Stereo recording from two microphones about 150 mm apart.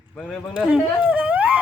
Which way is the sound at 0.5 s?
10° right (ahead or behind).